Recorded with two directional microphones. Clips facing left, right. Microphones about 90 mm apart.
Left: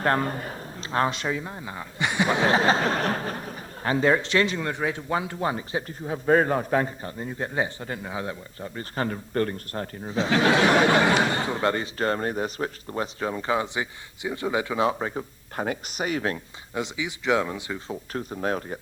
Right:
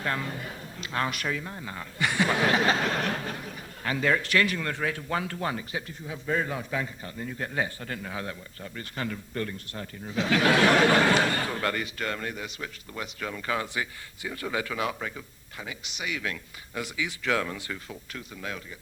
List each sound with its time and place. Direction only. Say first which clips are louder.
0.0 s speech: left 7 dB; 45° left (ahead or behind); by 5.8 s 25° left (ahead or behind)
6.1 s a man's voice: left 9 dB; 50° left (ahead or behind)
7.2 s speech: left 3 dB; 25° left (ahead or behind)
15.5 s a man's voice: left 11 dB; 50° left (ahead or behind)
16.7 s speech: left 3 dB; 20° left (ahead or behind)
18.1 s speech: left 10 dB; 40° left (ahead or behind)